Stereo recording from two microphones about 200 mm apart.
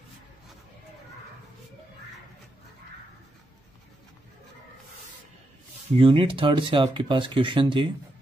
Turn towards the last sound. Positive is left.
turn(degrees=-25)  # may be behind; listen again after turning